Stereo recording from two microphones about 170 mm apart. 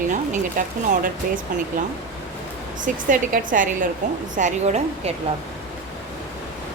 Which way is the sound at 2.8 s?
50° right (ahead or behind).